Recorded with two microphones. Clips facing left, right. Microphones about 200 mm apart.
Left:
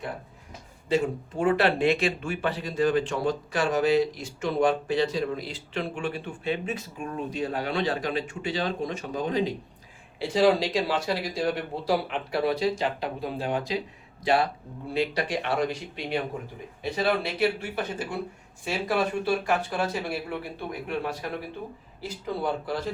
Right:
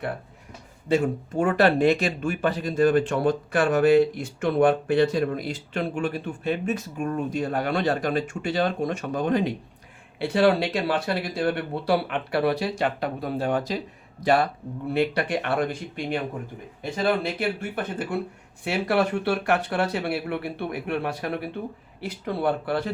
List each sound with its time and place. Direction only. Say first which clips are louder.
0.9 s speech: right 3 dB; 50° right (ahead or behind)
14.9 s speech: right 3 dB; 60° right (ahead or behind)